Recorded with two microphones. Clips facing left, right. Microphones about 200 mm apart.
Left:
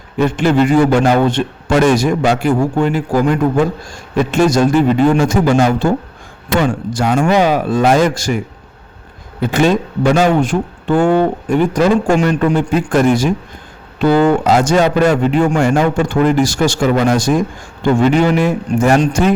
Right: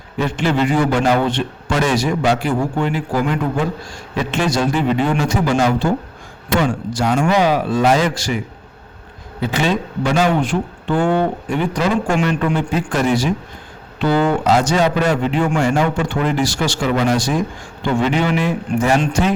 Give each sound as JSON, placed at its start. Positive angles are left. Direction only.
{"t": 0.2, "sound": "a man's voice", "side_deg": 50}
{"t": 9.4, "sound": "a man's voice", "side_deg": 50}